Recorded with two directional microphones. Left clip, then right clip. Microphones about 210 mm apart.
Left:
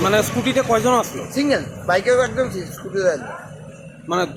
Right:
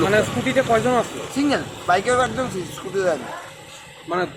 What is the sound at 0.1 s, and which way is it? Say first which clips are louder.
Speech: left 1 dB; 25° left (ahead or behind).